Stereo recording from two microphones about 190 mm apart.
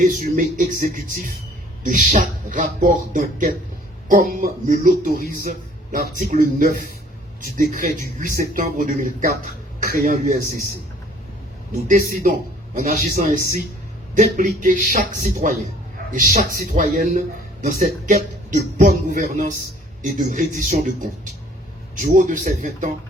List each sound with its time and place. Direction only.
0.0 s speech: 40° right (ahead or behind)
11.9 s speech: 45° right (ahead or behind)
21.9 s speech: 45° right (ahead or behind)